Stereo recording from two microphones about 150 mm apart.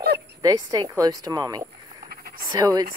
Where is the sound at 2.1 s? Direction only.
90° right.